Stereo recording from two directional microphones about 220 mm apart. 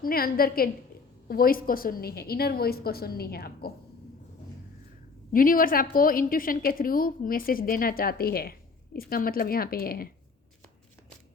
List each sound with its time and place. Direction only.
0.0 s a woman's voice: 40° left (ahead or behind)
5.3 s a woman's voice: 40° left (ahead or behind)